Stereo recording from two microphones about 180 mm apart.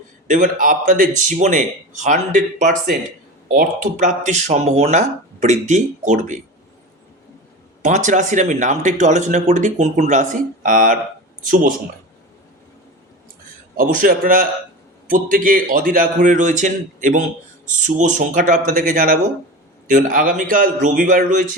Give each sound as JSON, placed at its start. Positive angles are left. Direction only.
{"t": 0.3, "sound": "speech", "side_deg": -45}
{"t": 7.9, "sound": "speech", "side_deg": -45}
{"t": 13.7, "sound": "speech", "side_deg": -50}